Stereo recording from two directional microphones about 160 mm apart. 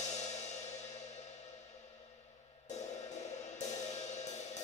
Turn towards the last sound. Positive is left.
turn(degrees=45)  # may be behind; listen again after turning